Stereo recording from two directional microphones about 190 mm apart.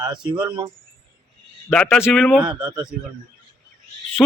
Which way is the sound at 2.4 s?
20° right (ahead or behind).